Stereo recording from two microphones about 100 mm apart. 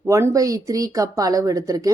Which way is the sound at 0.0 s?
30° right (ahead or behind).